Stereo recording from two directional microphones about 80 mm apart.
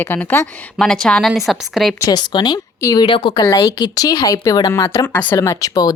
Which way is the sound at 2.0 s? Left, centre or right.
Left.